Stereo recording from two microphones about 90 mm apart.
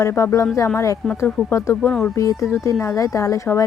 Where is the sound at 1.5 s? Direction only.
30° left (ahead or behind).